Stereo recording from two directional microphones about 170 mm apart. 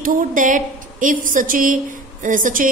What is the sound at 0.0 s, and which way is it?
A woman's voice, 50° right (ahead or behind).